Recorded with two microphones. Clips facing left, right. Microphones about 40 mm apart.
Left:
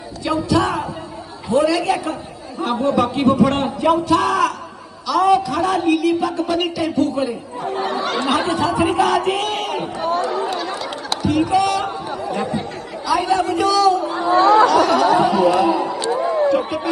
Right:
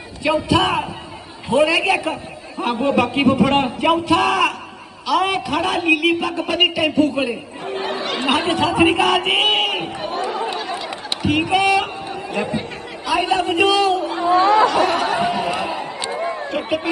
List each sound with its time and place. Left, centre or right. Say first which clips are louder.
0.2 s a man's voice: right 1 dB; right
8.3 s a man's voice: right 2 dB; right
10.0 s chatter: left 3 dB; centre
11.2 s speech: left 1 dB; right
12.1 s chatter: even; right
13.1 s a sound: left 1 dB; right
14.4 s chatter: left 5 dB; right
16.6 s a man's voice: even; right